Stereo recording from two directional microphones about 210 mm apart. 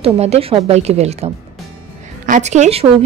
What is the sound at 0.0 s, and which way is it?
A woman's voice, 30° right (ahead or behind).